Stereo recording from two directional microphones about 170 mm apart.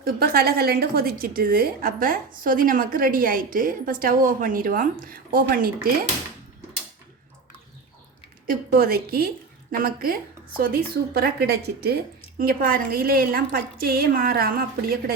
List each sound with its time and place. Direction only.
0.0 s a woman's voice: 65° right (ahead or behind)
8.4 s a woman's voice: 60° right (ahead or behind)